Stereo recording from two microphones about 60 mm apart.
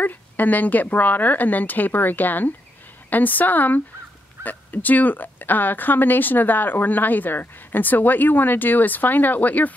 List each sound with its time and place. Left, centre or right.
0.0 s speech: left